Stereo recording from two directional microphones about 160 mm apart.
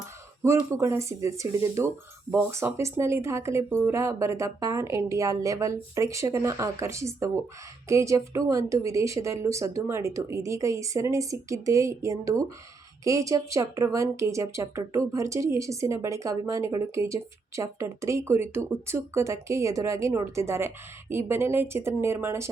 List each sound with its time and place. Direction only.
0.4 s speech: 20° right (ahead or behind)